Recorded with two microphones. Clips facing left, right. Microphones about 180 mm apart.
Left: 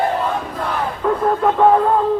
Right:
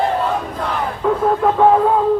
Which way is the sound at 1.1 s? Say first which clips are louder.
Right 1 dB; centre (ahead or behind).